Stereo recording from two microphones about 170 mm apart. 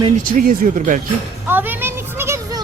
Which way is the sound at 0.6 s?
50° right (ahead or behind).